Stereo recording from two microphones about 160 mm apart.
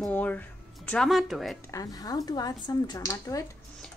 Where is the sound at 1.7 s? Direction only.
20° left (ahead or behind).